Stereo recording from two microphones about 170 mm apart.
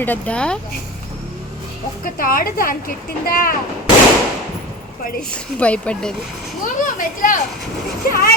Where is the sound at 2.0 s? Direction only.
55° left (ahead or behind).